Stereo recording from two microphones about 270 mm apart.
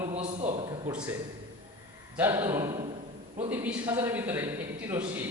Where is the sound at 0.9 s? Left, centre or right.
Centre.